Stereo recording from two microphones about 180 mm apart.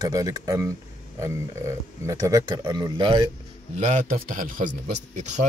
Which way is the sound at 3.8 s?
40° right (ahead or behind).